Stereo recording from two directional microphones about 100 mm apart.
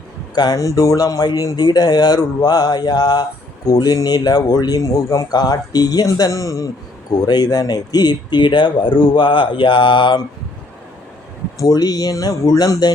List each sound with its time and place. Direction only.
0.3 s speech: 40° left (ahead or behind)
11.5 s speech: 40° left (ahead or behind)